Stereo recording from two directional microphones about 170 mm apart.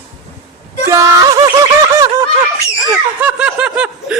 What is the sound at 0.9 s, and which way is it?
Music, 20° right (ahead or behind).